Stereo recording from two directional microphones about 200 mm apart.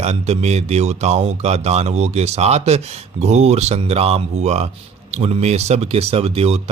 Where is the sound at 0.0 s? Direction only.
35° right (ahead or behind).